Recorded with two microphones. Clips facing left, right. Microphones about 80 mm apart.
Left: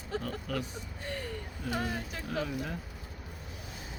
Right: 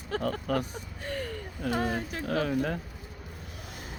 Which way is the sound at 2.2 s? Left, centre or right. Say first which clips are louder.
Right 7 dB; right.